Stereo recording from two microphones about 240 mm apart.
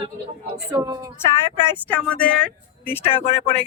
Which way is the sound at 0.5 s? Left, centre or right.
Centre.